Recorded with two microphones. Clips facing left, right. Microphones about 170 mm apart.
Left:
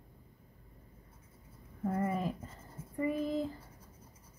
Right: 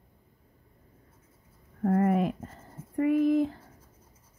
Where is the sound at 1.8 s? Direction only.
70° right (ahead or behind).